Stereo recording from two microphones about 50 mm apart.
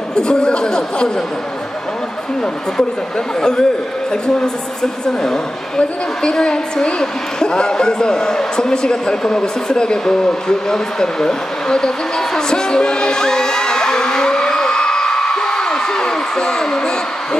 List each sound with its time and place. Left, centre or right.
0.1 s a man's voice: centre
3.3 s a man's voice: centre
5.0 s a man's voice: centre